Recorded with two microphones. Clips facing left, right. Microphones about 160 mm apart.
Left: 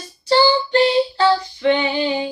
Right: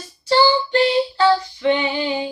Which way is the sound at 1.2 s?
30° left (ahead or behind).